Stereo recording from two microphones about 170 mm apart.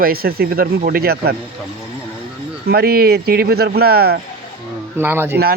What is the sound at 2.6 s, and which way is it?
Speech, 65° right (ahead or behind).